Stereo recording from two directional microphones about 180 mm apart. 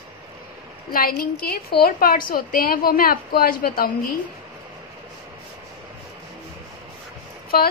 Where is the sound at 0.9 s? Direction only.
55° left (ahead or behind).